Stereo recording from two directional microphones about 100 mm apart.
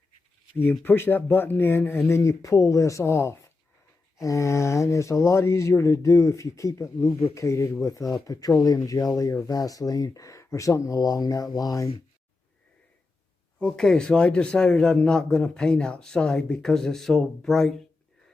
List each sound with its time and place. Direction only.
0.9 s speech: 20° left (ahead or behind); by 11.9 s 35° left (ahead or behind)
13.6 s a man's voice: 5° left (ahead or behind)